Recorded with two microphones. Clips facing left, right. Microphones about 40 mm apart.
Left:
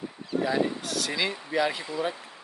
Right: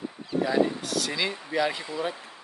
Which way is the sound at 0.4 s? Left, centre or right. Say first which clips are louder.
Right 3 dB; centre.